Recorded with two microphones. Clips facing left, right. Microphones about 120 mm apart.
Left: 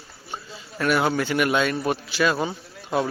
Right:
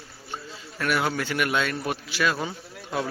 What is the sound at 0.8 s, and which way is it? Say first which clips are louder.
Speech: left 4 dB; 30° left (ahead or behind).